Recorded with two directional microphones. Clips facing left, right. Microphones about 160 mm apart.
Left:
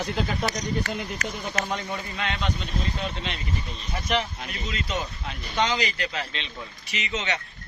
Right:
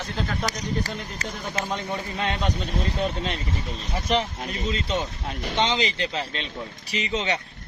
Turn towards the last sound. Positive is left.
turn(degrees=-30)  # may be behind; listen again after turning